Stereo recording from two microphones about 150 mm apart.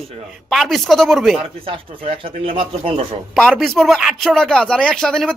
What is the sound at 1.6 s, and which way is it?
Speech, 35° right (ahead or behind).